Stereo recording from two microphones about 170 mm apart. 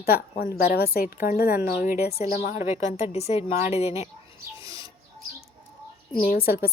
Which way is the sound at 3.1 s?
40° left (ahead or behind).